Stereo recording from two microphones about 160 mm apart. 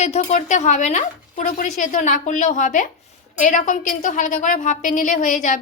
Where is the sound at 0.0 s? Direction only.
45° left (ahead or behind).